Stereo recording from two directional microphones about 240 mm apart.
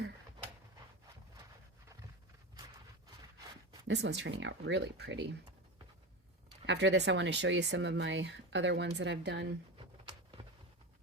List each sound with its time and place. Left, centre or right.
3.8 s speech: right
6.7 s speech: right
9.7 s a sound: right